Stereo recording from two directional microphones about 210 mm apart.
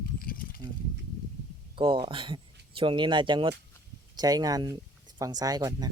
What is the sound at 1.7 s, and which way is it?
Speech, 25° right (ahead or behind).